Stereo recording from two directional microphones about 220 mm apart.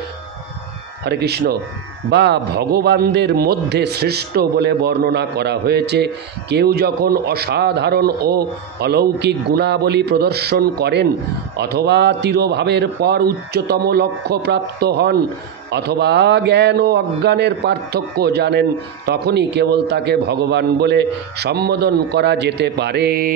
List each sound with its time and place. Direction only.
1.0 s a man's voice: 50° right (ahead or behind)